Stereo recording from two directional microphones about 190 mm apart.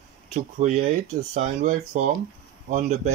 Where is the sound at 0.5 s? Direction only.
40° right (ahead or behind).